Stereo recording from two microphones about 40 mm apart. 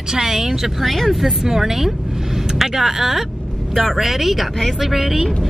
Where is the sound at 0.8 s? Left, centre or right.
Centre.